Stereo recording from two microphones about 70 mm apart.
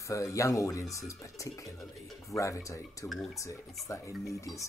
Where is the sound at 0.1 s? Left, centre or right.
Left.